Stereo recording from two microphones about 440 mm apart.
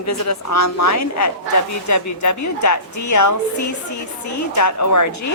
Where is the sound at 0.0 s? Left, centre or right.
Left.